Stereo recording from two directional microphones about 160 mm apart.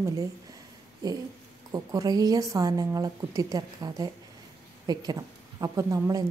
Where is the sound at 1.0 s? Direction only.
25° right (ahead or behind).